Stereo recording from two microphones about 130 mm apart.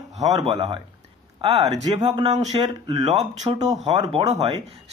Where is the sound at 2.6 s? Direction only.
30° right (ahead or behind).